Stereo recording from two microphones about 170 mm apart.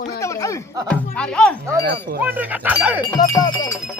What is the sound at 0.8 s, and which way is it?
Speech, 5° left (ahead or behind).